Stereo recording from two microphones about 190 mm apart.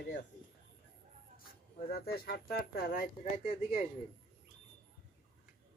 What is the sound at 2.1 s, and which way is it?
Speech, 55° left (ahead or behind).